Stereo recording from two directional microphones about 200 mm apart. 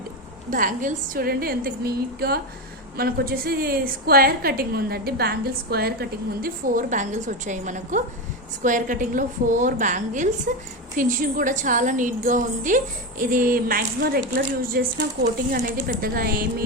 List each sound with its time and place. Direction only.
0.5 s a woman's voice: 40° right (ahead or behind)